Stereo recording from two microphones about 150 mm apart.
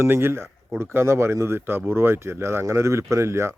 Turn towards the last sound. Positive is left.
turn(degrees=-20)  # may be behind; listen again after turning